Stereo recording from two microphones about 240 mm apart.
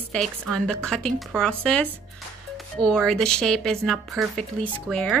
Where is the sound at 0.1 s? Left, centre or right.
Centre.